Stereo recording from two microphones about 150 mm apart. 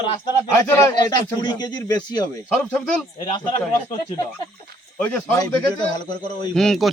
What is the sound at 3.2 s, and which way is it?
Speech, 35° left (ahead or behind).